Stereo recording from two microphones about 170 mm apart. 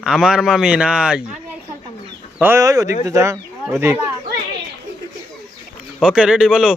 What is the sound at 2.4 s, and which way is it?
Speech, 15° right (ahead or behind).